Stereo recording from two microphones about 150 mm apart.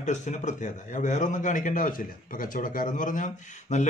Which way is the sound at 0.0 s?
50° left (ahead or behind).